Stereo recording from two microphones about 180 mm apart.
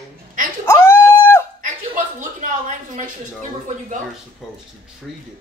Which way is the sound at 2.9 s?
45° right (ahead or behind).